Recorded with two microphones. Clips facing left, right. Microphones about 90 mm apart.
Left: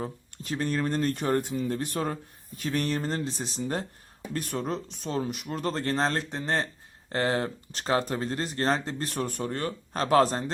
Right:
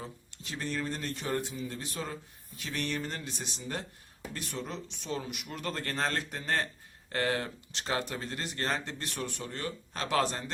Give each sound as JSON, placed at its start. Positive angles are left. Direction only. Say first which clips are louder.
{"t": 0.0, "sound": "speech", "louder": "left 8 dB", "side_deg": 45}